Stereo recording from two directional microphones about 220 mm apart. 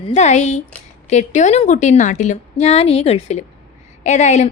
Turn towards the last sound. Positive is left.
turn(degrees=30)  # may be behind; listen again after turning